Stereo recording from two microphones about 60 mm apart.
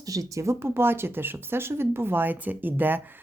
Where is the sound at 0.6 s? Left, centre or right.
Right.